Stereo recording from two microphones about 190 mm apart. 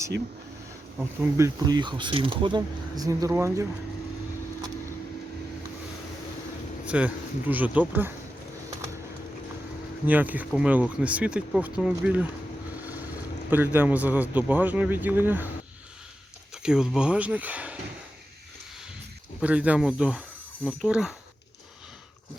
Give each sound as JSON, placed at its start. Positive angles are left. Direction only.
{"t": 0.9, "sound": "speech", "side_deg": -10}
{"t": 6.8, "sound": "speech", "side_deg": -5}
{"t": 10.1, "sound": "speech", "side_deg": -10}
{"t": 13.5, "sound": "speech", "side_deg": -10}
{"t": 16.6, "sound": "speech", "side_deg": -5}
{"t": 19.4, "sound": "speech", "side_deg": -5}